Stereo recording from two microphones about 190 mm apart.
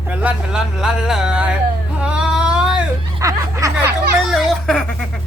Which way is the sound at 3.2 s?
15° right (ahead or behind).